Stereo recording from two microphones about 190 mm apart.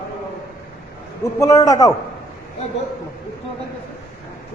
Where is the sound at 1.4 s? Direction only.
20° left (ahead or behind).